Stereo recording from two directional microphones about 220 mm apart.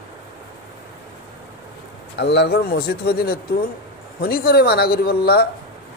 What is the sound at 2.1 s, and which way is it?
Speech, 50° left (ahead or behind).